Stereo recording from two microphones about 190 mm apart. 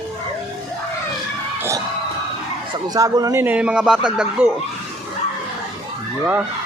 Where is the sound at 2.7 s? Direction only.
20° right (ahead or behind).